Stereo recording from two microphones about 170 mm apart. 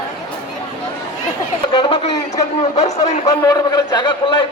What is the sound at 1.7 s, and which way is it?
Speech, 30° left (ahead or behind).